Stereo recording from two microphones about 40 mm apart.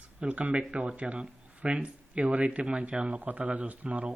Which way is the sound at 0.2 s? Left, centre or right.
Right.